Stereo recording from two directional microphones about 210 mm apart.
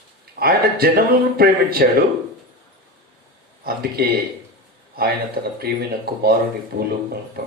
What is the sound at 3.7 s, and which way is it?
Speech, 45° right (ahead or behind).